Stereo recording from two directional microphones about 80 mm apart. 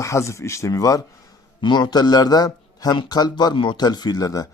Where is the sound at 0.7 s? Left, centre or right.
Left.